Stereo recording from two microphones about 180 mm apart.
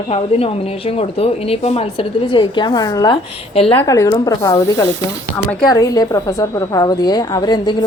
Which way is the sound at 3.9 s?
20° left (ahead or behind).